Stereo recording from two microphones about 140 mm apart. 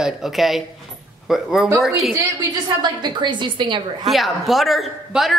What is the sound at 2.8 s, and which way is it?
Speech, 35° right (ahead or behind).